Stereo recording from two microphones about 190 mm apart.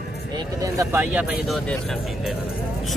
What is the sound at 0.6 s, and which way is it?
Speech, 15° right (ahead or behind).